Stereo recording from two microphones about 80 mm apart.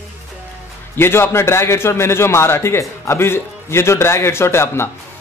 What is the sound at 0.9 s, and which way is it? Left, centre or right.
Speech, left.